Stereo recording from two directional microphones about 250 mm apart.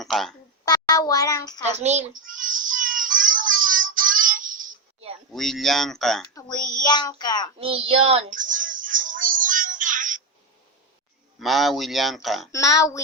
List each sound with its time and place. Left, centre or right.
0.0 s speech: centre
0.6 s speech: centre
1.8 s child singing: right
5.3 s speech: centre
6.8 s child singing: centre
7.6 s child singing: right
11.3 s speech: centre
12.5 s child singing: centre